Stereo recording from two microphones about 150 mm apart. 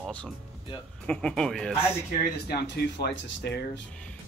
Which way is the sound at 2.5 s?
90° left.